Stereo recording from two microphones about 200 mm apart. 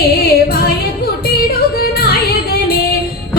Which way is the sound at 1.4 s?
50° left (ahead or behind).